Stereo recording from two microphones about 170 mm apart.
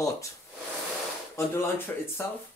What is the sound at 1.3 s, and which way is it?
Speech, 15° left (ahead or behind).